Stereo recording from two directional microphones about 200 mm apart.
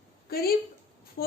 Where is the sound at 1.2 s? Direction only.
50° left (ahead or behind).